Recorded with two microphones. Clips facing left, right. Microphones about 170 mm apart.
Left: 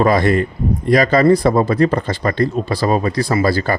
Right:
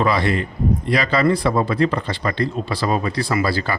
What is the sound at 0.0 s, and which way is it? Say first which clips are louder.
A man's voice: left 5 dB; 45° left (ahead or behind).